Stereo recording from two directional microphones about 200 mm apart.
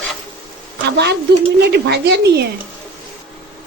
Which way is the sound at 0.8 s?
55° right (ahead or behind).